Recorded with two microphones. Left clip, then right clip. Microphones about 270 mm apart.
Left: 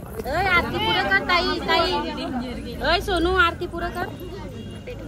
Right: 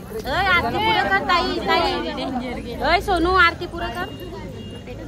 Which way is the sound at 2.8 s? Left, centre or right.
Right.